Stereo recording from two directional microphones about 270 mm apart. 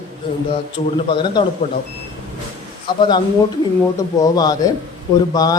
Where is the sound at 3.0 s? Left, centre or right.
Centre.